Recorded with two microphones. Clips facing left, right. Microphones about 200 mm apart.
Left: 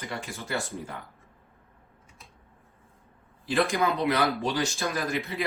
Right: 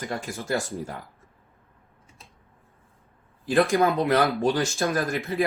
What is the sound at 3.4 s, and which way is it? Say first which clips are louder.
Speech: right 5 dB; 50° right (ahead or behind).